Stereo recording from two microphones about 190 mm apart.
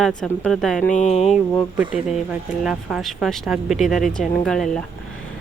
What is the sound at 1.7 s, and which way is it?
Speech, 5° right (ahead or behind).